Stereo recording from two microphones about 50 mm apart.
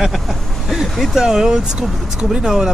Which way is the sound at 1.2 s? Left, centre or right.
Centre.